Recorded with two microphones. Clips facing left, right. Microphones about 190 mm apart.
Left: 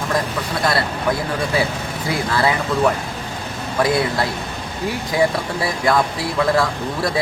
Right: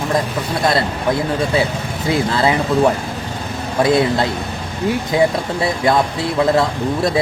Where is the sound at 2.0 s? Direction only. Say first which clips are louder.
Right 3 dB; 25° right (ahead or behind).